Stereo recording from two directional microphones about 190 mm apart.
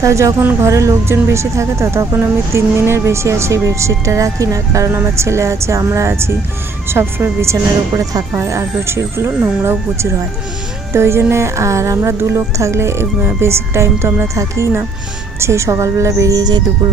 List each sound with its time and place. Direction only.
0.0 s speech: 15° right (ahead or behind)